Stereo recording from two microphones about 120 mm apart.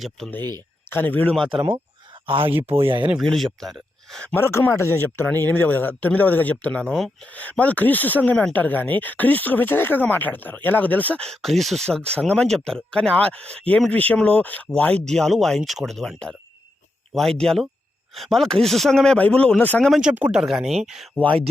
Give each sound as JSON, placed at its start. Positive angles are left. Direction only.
{"t": 0.9, "sound": "speech", "side_deg": 15}
{"t": 1.5, "sound": "speech", "side_deg": -45}
{"t": 3.1, "sound": "a man's voice", "side_deg": 0}
{"t": 4.4, "sound": "a man's voice", "side_deg": 25}
{"t": 7.3, "sound": "a man's voice", "side_deg": 15}
{"t": 19.9, "sound": "a man's voice", "side_deg": -5}